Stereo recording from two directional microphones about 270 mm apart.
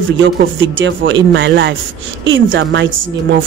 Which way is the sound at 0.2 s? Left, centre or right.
Right.